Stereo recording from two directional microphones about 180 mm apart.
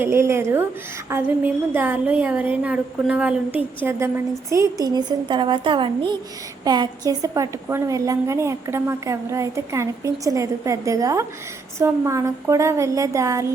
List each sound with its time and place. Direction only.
0.0 s a woman's voice: 15° right (ahead or behind)